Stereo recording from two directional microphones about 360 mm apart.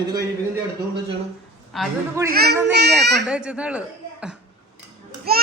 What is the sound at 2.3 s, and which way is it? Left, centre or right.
Speech, right.